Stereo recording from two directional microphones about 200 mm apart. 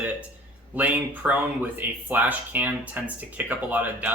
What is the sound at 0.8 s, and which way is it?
Speech, 10° right (ahead or behind).